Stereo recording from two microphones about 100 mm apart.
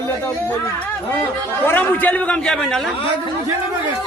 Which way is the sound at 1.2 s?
20° left (ahead or behind).